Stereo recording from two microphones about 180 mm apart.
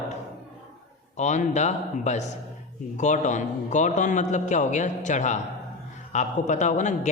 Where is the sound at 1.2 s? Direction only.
40° left (ahead or behind).